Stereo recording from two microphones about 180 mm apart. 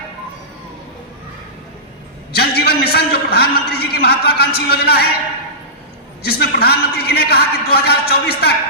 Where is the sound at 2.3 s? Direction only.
60° left (ahead or behind).